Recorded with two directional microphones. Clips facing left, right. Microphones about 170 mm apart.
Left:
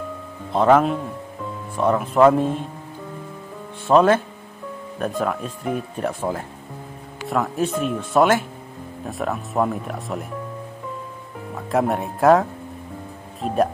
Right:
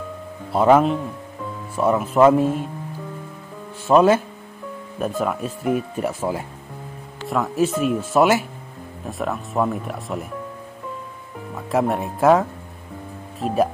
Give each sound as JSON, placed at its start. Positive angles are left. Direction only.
{"t": 0.5, "sound": "speech", "side_deg": -10}
{"t": 3.8, "sound": "speech", "side_deg": -5}
{"t": 11.5, "sound": "speech", "side_deg": 0}